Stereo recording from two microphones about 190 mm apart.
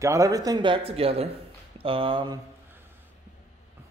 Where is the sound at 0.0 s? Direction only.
15° right (ahead or behind).